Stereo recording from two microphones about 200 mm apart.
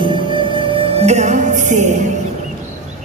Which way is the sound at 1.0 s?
35° right (ahead or behind).